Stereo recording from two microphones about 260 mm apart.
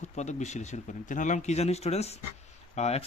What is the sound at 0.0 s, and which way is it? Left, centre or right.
Speech, left.